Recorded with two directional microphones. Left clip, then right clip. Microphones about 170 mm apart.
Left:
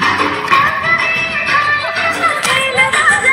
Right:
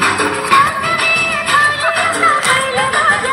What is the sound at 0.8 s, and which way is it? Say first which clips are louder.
Music: left 1 dB; 50° left (ahead or behind).